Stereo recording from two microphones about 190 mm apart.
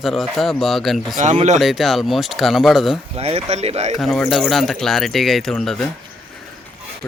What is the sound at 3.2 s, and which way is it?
Speech, 30° right (ahead or behind).